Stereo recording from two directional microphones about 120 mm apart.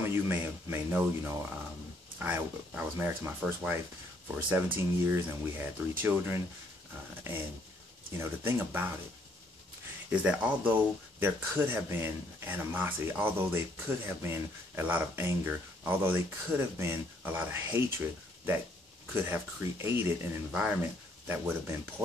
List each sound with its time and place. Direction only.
0.0 s speech: 15° right (ahead or behind)
8.1 s speech: 20° right (ahead or behind)
10.0 s speech: 10° right (ahead or behind)
19.2 s speech: 20° right (ahead or behind)